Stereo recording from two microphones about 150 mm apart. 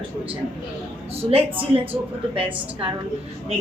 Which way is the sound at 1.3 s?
40° right (ahead or behind).